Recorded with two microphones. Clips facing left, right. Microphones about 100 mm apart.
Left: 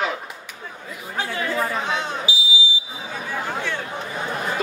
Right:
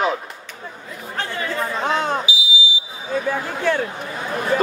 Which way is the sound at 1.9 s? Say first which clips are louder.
Right 5 dB; 50° right (ahead or behind).